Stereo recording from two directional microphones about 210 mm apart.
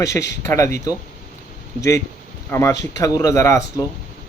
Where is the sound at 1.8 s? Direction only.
15° left (ahead or behind).